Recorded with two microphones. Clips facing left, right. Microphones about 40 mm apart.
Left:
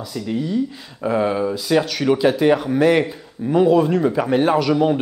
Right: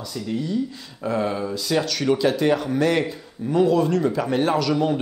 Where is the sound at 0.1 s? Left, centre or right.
Centre.